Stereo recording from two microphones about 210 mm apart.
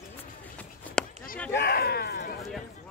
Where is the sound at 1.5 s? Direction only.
50° left (ahead or behind).